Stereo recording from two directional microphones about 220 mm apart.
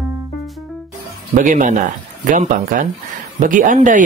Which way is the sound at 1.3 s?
35° right (ahead or behind).